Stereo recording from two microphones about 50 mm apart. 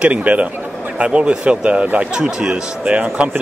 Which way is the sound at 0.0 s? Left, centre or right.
Right.